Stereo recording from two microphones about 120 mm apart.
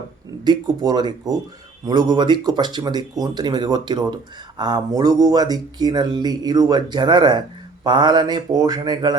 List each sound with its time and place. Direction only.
0.4 s speech: 35° right (ahead or behind)